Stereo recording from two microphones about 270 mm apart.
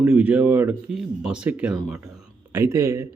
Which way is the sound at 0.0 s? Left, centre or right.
Centre.